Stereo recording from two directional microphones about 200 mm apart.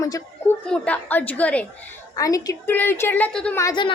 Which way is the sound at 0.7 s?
5° left (ahead or behind).